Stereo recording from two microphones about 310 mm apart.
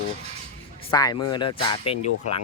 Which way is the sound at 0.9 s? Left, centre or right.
Centre.